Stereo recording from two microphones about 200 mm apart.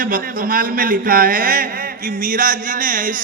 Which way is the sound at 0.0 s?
45° right (ahead or behind).